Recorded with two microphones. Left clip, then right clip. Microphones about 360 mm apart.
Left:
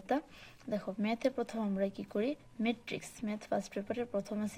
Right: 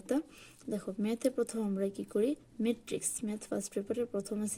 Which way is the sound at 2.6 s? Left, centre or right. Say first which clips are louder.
Right 2 dB; centre.